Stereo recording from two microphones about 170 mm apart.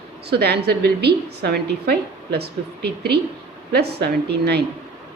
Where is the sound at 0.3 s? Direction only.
70° right (ahead or behind).